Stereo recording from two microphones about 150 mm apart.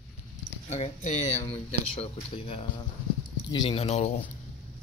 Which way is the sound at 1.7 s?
40° left (ahead or behind).